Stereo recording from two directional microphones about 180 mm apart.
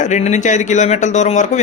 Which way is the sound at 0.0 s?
40° left (ahead or behind).